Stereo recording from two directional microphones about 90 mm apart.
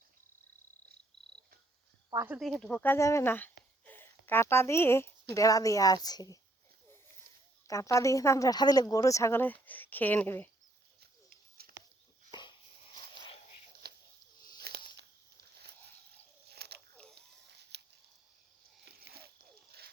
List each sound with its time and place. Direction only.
2.4 s speech: 5° left (ahead or behind)
3.0 s speech: 35° left (ahead or behind)
3.3 s speech: 20° left (ahead or behind); by 6.4 s 45° left (ahead or behind)
7.7 s speech: 35° left (ahead or behind)
12.3 s a sound: 60° left (ahead or behind)